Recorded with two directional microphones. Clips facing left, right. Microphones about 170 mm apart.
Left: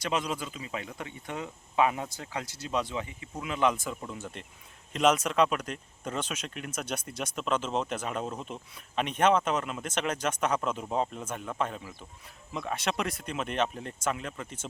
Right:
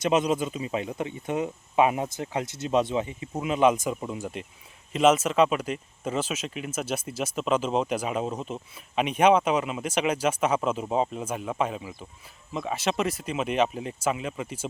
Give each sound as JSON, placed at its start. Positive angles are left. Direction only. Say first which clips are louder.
{"t": 0.0, "sound": "speech", "louder": "right 8 dB", "side_deg": -20}